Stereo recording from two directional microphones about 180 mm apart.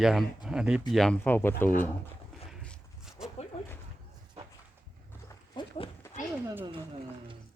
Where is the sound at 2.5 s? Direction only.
Centre (ahead or behind).